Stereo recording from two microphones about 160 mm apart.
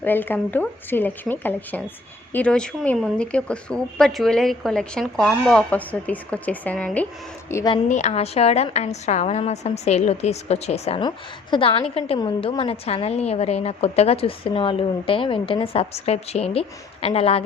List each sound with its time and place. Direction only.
0.0 s speech: 10° left (ahead or behind)
7.5 s speech: 25° left (ahead or behind)
7.9 s a woman's voice: 45° left (ahead or behind)